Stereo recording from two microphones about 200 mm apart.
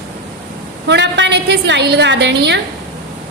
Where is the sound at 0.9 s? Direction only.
60° right (ahead or behind).